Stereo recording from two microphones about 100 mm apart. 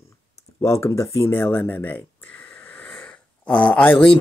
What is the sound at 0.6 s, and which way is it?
Speech, 30° left (ahead or behind).